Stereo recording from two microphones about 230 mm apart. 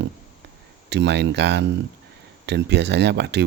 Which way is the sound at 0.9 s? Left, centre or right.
Right.